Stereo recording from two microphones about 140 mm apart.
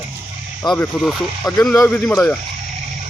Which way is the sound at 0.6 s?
30° left (ahead or behind).